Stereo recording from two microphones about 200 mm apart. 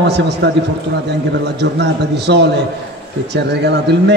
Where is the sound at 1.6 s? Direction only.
60° right (ahead or behind).